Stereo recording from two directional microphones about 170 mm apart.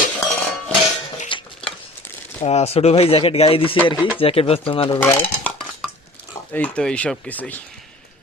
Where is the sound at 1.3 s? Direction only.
30° left (ahead or behind).